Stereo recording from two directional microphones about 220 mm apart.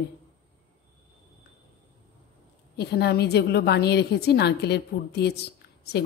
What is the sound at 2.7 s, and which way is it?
A woman's voice, 50° left (ahead or behind).